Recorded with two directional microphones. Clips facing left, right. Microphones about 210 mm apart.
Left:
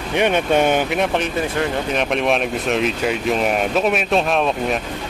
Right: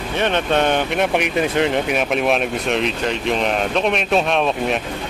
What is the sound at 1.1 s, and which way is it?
Speech, 15° right (ahead or behind).